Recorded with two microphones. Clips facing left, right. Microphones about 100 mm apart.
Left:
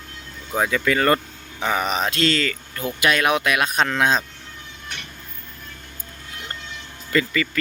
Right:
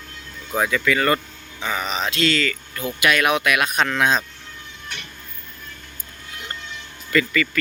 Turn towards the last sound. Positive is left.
turn(degrees=25)  # may be behind; listen again after turning